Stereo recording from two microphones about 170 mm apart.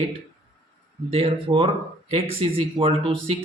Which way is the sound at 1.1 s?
30° right (ahead or behind).